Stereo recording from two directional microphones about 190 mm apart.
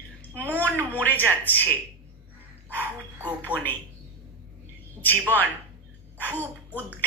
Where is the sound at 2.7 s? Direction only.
10° right (ahead or behind).